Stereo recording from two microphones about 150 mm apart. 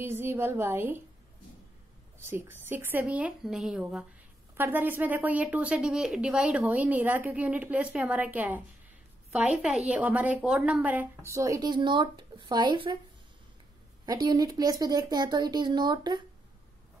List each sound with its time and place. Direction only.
0.0 s a woman's voice: 15° right (ahead or behind)
2.1 s a woman's voice: 15° right (ahead or behind)
4.6 s a woman's voice: 15° right (ahead or behind); by 13.0 s 35° right (ahead or behind)
14.0 s speech: 25° right (ahead or behind)